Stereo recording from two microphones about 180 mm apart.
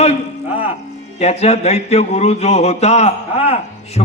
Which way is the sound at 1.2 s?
35° left (ahead or behind).